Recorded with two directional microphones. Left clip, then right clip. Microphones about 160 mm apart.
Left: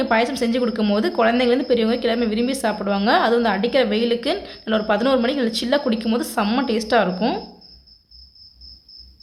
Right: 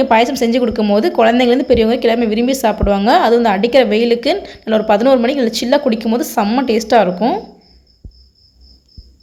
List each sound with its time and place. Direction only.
0.0 s a woman's voice: 25° right (ahead or behind)